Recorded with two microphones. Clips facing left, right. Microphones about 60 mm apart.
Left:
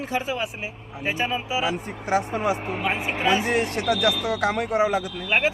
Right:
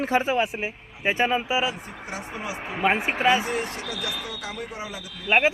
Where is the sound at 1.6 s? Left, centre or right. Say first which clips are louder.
Left 2 dB; left.